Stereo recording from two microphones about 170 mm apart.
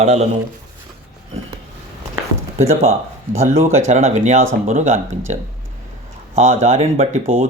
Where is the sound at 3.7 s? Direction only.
40° right (ahead or behind).